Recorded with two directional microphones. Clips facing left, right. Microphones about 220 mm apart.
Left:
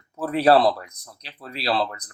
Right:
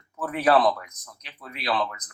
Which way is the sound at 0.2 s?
30° left (ahead or behind).